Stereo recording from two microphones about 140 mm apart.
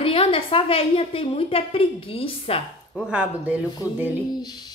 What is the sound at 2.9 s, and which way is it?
Speech, 10° right (ahead or behind).